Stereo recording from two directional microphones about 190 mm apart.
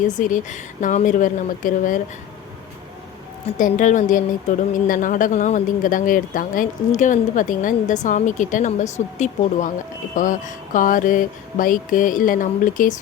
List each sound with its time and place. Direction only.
0.1 s speech: 45° left (ahead or behind)
3.6 s speech: 40° left (ahead or behind)